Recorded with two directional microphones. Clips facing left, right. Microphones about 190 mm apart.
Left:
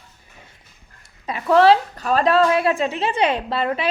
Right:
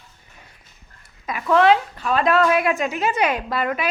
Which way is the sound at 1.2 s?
35° left (ahead or behind).